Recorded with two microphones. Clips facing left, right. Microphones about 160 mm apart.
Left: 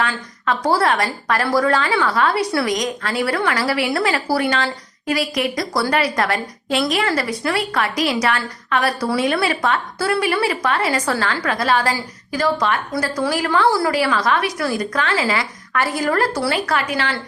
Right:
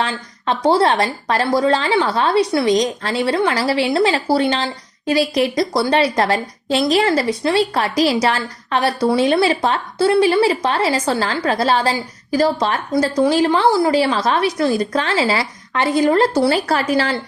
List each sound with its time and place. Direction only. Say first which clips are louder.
0.0 s speech: right 1 dB; 30° right (ahead or behind)
12.9 s speech: right 6 dB; 20° right (ahead or behind)